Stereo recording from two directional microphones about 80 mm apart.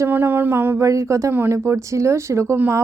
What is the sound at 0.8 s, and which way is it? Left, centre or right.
A woman's voice, right.